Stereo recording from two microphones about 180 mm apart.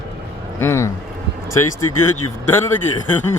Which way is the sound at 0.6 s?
15° left (ahead or behind).